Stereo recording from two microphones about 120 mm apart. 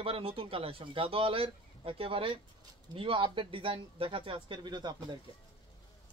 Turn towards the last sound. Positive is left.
turn(degrees=-40)  # may be behind; listen again after turning